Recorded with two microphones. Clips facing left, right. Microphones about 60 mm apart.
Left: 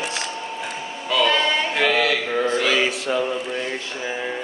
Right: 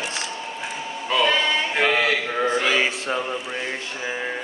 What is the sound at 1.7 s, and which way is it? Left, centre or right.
Speech, centre.